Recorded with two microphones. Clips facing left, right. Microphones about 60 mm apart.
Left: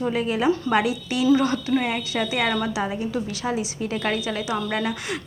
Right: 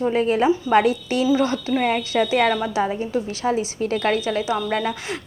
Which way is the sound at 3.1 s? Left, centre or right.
Right.